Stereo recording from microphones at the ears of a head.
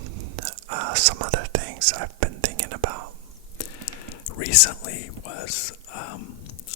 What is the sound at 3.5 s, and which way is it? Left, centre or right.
Whispering, left.